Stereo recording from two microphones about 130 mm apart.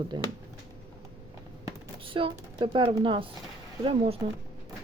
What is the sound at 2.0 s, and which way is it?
Speech, 45° right (ahead or behind).